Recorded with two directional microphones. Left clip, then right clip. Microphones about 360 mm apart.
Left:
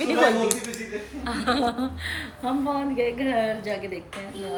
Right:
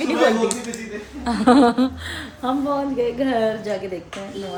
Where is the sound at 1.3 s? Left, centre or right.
Centre.